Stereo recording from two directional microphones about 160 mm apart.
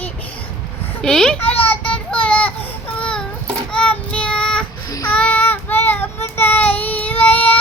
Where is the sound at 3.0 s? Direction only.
5° left (ahead or behind).